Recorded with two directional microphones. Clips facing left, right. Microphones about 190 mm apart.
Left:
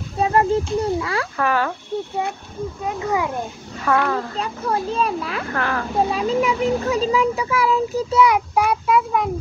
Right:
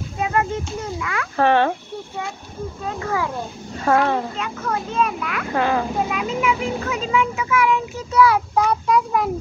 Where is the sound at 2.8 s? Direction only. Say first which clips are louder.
Left 2 dB; 15° left (ahead or behind).